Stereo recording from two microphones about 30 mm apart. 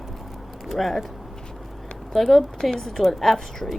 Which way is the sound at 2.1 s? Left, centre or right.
Centre.